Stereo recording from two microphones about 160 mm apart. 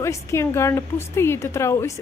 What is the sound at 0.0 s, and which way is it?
A woman's voice, 15° left (ahead or behind).